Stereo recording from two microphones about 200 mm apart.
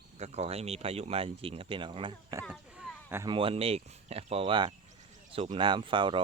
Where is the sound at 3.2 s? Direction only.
25° right (ahead or behind).